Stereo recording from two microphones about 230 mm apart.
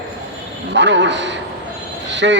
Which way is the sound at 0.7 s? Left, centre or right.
Right.